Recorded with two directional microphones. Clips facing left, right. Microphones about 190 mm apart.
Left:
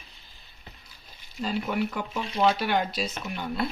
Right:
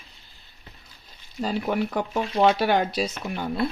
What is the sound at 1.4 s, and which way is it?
Speech, 35° right (ahead or behind).